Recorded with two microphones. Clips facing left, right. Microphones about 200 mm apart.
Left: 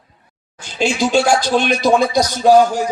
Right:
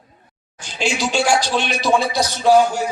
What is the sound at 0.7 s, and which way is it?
Speech, 50° left (ahead or behind).